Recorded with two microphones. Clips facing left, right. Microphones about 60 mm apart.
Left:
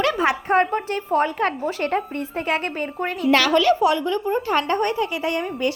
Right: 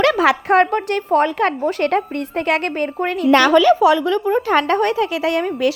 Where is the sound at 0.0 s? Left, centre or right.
Right.